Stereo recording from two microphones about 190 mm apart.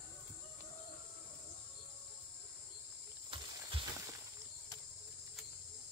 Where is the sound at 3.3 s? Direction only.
25° right (ahead or behind).